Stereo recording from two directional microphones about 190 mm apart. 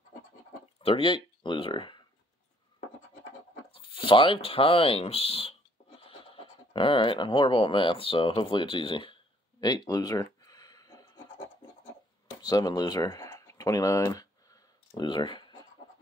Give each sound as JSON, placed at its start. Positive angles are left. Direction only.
{"t": 0.7, "sound": "speech", "side_deg": 30}
{"t": 3.7, "sound": "speech", "side_deg": 25}
{"t": 12.4, "sound": "a sound", "side_deg": 20}